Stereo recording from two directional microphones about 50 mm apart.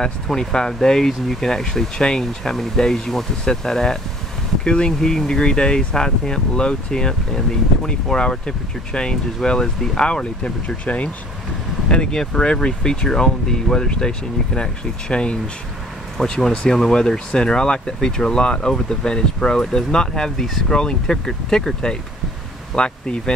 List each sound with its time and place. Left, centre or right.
0.0 s speech: centre
11.9 s speech: centre